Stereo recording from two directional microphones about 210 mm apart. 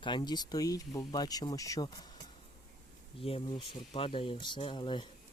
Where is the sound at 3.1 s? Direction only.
25° left (ahead or behind).